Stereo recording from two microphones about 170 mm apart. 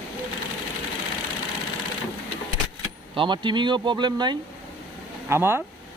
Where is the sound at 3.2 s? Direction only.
30° right (ahead or behind).